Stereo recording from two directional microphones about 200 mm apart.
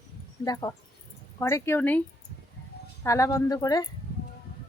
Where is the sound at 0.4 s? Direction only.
20° left (ahead or behind).